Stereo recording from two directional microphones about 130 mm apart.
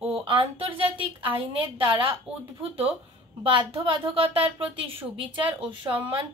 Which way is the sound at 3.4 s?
45° right (ahead or behind).